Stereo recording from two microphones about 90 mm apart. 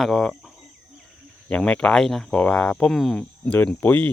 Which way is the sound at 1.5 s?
10° left (ahead or behind).